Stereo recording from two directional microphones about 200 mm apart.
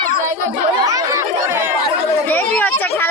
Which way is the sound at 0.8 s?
15° right (ahead or behind).